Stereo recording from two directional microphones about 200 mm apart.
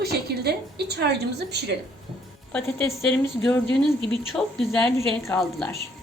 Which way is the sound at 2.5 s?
15° left (ahead or behind).